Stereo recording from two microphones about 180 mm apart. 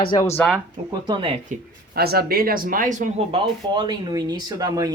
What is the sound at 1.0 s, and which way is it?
Speech, 25° right (ahead or behind).